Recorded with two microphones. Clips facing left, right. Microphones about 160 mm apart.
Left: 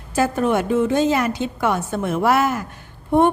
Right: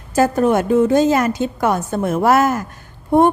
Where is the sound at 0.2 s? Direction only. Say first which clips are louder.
Right 4 dB; 40° right (ahead or behind).